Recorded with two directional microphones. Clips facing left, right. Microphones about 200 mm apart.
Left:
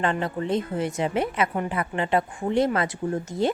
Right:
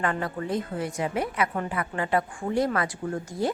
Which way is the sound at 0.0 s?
25° left (ahead or behind).